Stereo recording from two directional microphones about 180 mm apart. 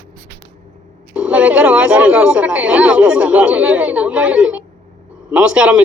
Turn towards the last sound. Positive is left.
turn(degrees=-5)  # may be behind; listen again after turning